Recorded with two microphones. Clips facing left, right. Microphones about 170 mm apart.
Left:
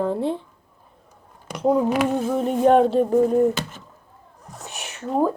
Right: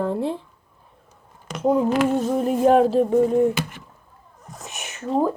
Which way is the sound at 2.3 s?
Centre (ahead or behind).